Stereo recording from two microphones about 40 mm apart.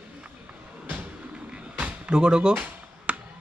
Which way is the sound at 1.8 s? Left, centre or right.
Right.